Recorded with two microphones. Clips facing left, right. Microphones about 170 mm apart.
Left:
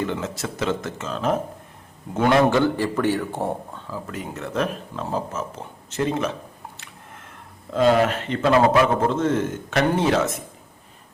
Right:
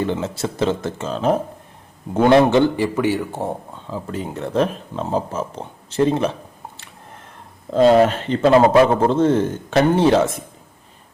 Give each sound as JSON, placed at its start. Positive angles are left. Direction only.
{"t": 0.0, "sound": "a man's voice", "side_deg": -30}
{"t": 3.8, "sound": "a man's voice", "side_deg": -25}
{"t": 7.7, "sound": "a man's voice", "side_deg": -35}